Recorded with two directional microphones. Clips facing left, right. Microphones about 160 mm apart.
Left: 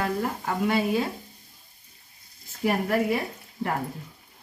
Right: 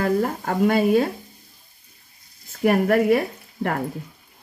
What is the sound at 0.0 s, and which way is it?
Speech, 50° right (ahead or behind).